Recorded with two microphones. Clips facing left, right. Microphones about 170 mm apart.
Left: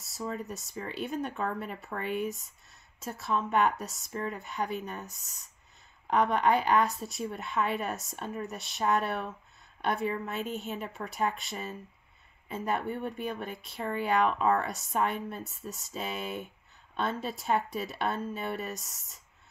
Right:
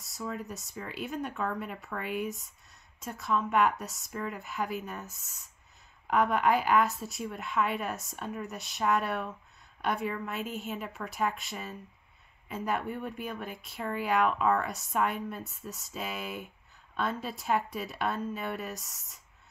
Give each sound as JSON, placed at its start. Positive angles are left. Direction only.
{"t": 0.4, "sound": "a woman's voice", "side_deg": 0}
{"t": 10.0, "sound": "a woman's voice", "side_deg": 30}
{"t": 10.3, "sound": "speech", "side_deg": 0}